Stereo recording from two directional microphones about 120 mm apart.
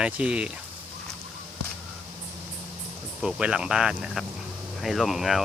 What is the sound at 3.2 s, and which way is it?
Speech, 5° right (ahead or behind).